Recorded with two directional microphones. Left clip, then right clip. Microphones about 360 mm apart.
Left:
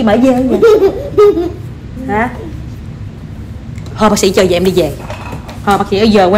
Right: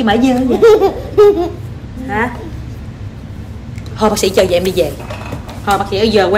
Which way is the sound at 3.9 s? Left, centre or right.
Centre.